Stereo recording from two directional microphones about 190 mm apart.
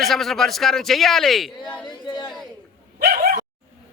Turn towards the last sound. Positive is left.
turn(degrees=-50)  # may be behind; listen again after turning